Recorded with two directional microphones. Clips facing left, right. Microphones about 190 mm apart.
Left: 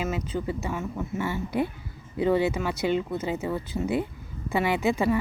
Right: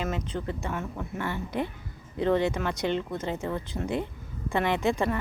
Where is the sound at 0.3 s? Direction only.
5° left (ahead or behind).